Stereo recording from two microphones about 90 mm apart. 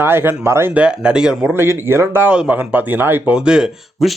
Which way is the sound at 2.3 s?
15° right (ahead or behind).